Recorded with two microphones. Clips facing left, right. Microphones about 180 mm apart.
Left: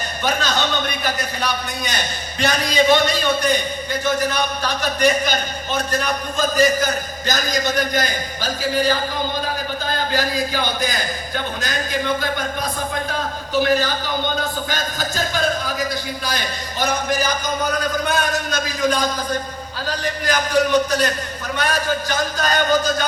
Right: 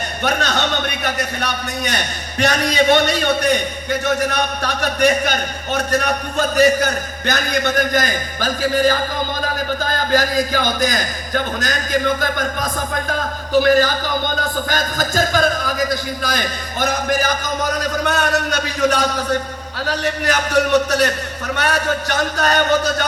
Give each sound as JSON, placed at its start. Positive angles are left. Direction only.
{"t": 0.2, "sound": "a man's voice", "side_deg": -65}
{"t": 17.6, "sound": "a man's voice", "side_deg": -75}